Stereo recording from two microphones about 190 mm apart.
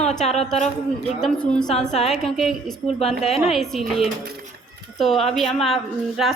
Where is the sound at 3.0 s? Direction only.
35° left (ahead or behind).